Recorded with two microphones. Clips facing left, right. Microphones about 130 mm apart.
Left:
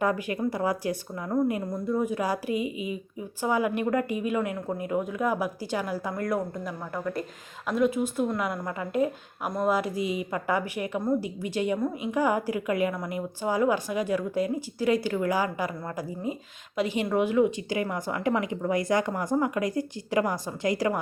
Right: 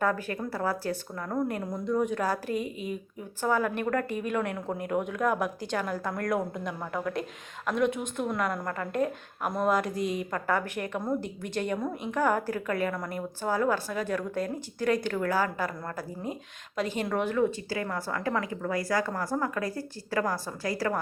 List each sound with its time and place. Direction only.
0.0 s a woman's voice: 15° left (ahead or behind)